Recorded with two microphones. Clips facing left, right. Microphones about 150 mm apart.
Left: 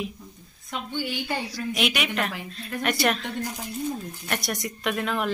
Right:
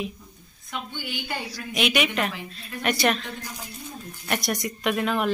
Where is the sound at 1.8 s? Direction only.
Centre (ahead or behind).